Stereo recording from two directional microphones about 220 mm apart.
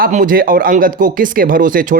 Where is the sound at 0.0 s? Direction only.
40° right (ahead or behind).